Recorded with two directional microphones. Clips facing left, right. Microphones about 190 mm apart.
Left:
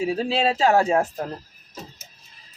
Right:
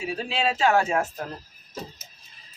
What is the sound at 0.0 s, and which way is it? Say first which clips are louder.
A man's voice: left 5 dB; 35° left (ahead or behind).